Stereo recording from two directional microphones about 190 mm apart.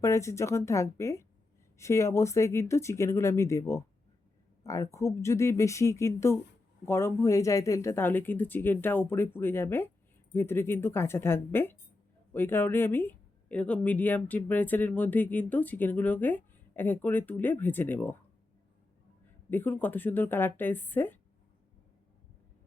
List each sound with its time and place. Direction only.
0.0 s speech: 15° left (ahead or behind)
19.5 s speech: 10° left (ahead or behind)